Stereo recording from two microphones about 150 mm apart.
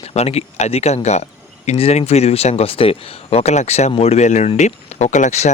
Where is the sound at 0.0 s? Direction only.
45° left (ahead or behind).